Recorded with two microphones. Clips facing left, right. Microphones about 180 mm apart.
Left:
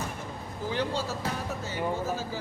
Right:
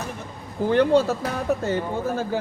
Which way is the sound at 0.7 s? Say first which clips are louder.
Right 13 dB; 60° right (ahead or behind).